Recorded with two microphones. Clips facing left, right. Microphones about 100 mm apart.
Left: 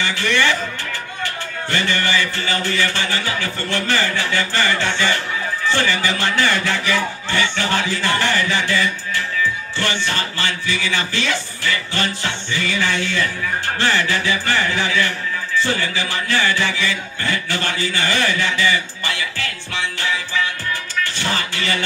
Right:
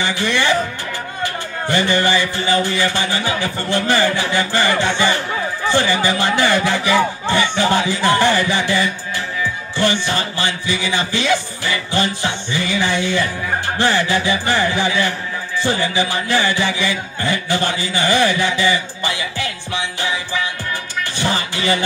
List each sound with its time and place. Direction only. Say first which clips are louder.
0.0 s music: right 1 dB; 15° right (ahead or behind)
1.2 s speech: right 4 dB; 15° right (ahead or behind)
21.0 s music: right 3 dB; 15° right (ahead or behind)